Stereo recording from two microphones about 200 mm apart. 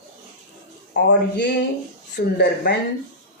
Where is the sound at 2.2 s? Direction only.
50° left (ahead or behind).